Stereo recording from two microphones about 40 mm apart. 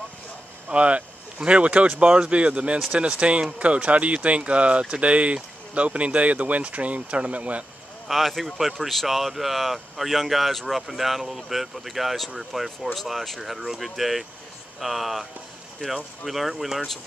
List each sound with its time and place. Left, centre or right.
0.7 s speech: right
8.1 s speech: centre
16.3 s speech: centre